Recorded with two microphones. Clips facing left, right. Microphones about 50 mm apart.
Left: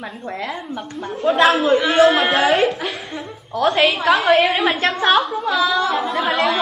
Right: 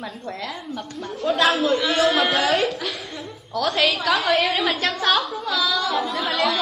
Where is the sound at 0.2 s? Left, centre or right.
Left.